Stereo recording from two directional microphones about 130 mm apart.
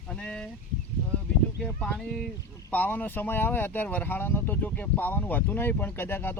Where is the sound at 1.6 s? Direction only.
5° left (ahead or behind).